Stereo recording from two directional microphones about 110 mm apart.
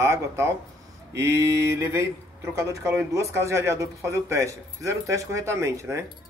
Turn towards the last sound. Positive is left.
turn(degrees=-25)  # may be behind; listen again after turning